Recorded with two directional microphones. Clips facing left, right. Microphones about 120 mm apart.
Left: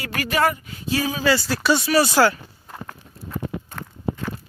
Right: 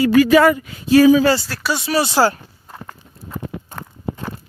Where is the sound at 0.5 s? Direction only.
90° right; by 1.3 s 60° right (ahead or behind).